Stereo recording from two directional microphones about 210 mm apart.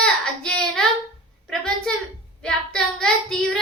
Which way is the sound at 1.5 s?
5° left (ahead or behind).